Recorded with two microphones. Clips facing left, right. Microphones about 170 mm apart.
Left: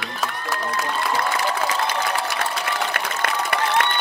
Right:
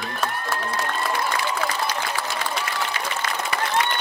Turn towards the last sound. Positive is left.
turn(degrees=60)  # may be behind; listen again after turning